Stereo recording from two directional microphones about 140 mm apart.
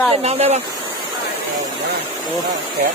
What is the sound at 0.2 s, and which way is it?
Speech, 50° right (ahead or behind).